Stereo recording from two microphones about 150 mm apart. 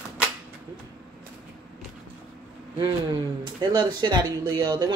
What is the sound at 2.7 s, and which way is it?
Speech, 25° right (ahead or behind).